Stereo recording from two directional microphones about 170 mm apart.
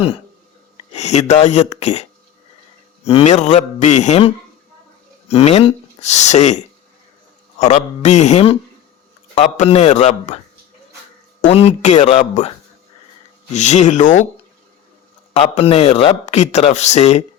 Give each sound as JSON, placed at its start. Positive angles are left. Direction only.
{"t": 0.9, "sound": "a man's voice", "side_deg": 40}
{"t": 5.3, "sound": "speech", "side_deg": 35}
{"t": 7.6, "sound": "a man's voice", "side_deg": 45}
{"t": 11.4, "sound": "a man's voice", "side_deg": 40}
{"t": 15.3, "sound": "speech", "side_deg": 35}